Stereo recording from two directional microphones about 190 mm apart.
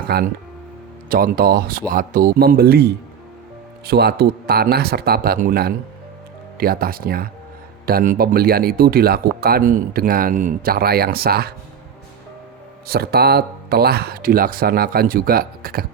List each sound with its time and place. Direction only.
0.1 s speech: 55° right (ahead or behind)
12.9 s speech: 55° right (ahead or behind)